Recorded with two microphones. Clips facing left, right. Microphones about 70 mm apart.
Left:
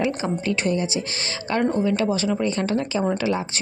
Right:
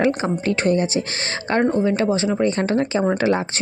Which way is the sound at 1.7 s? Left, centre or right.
Right.